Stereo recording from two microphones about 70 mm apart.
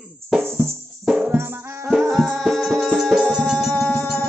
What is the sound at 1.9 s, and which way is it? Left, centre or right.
Music, centre.